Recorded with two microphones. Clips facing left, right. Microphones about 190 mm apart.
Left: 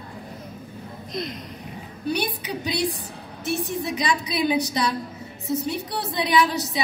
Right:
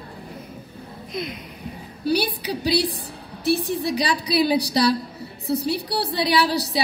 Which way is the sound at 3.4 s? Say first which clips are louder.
Right 5 dB; 35° right (ahead or behind).